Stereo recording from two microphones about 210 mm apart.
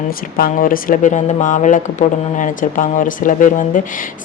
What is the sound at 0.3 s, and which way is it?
Speech, 45° left (ahead or behind).